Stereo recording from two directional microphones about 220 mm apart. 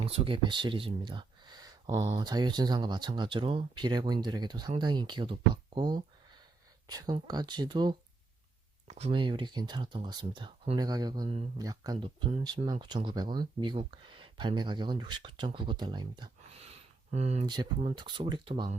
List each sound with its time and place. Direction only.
0.0 s speech: 25° right (ahead or behind)